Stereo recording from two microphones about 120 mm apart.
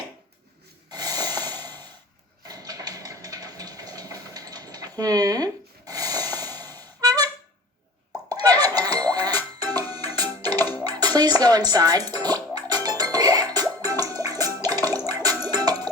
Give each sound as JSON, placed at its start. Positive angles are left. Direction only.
{"t": 0.9, "sound": "snort", "side_deg": -35}
{"t": 2.5, "sound": "a sound", "side_deg": -30}
{"t": 8.3, "sound": "music", "side_deg": -35}